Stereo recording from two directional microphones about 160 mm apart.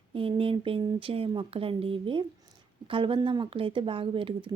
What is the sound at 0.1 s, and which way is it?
Speech, 35° right (ahead or behind).